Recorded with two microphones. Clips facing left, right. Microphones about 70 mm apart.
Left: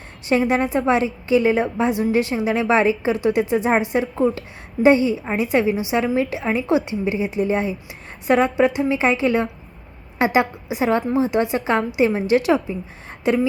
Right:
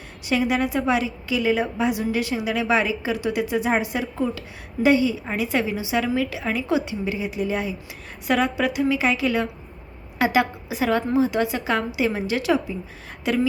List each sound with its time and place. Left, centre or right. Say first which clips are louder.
0.3 s a woman's voice: left 3 dB; left